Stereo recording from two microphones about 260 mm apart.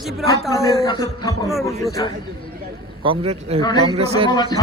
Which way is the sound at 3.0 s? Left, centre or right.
Right.